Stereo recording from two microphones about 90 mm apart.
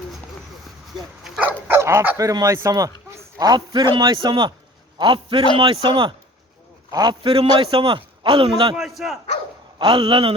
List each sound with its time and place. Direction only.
0.9 s bow-wow: 5° right (ahead or behind)
1.4 s dog: 25° right (ahead or behind)
2.1 s a man's voice: 40° right (ahead or behind)
4.9 s a man's voice: 65° right (ahead or behind)
6.9 s a man's voice: 50° right (ahead or behind)
7.3 s a man's voice: 85° right; by 8.4 s 70° right (ahead or behind)
8.7 s a man's voice: centre (ahead or behind)
9.7 s speech: 65° right (ahead or behind); by 10.3 s 85° right